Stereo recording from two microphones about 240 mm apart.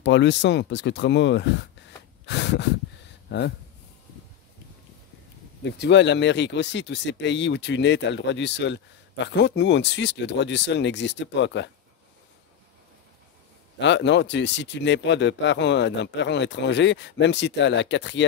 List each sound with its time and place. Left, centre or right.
0.0 s speech: left
5.6 s speech: left
13.7 s speech: left